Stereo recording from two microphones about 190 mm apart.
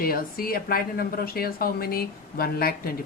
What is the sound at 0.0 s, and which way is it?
Speech, 50° left (ahead or behind).